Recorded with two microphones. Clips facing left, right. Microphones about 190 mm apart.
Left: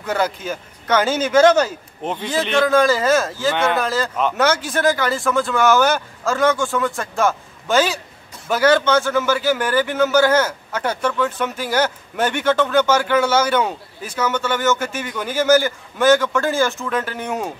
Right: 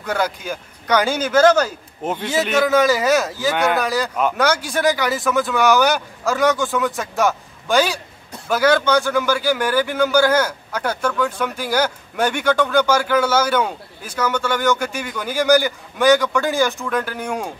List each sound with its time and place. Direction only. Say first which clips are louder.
0.0 s a man's voice: left 1 dB; 5° left (ahead or behind)
2.0 s a man's voice: right 1 dB; 5° right (ahead or behind)
2.9 s a man's voice: even; 15° right (ahead or behind)
3.3 s a man's voice: even; centre (ahead or behind)
8.6 s a man's voice: left 1 dB; 10° right (ahead or behind)
8.9 s a man's voice: even; centre (ahead or behind)
12.9 s a man's voice: left 1 dB; 10° right (ahead or behind)
13.6 s a man's voice: left 1 dB; 10° left (ahead or behind)